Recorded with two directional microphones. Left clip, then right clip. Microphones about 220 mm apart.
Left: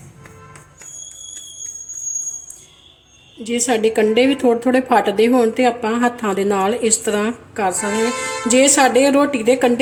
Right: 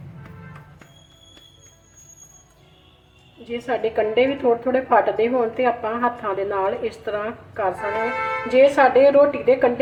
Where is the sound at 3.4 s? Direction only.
55° left (ahead or behind).